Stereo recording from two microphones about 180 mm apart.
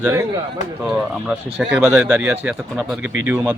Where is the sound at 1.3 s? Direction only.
5° right (ahead or behind).